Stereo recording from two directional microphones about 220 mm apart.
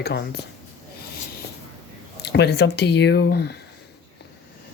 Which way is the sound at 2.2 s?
50° left (ahead or behind).